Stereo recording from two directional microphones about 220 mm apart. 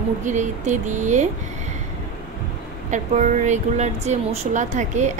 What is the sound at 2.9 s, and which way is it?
Speech, 35° right (ahead or behind).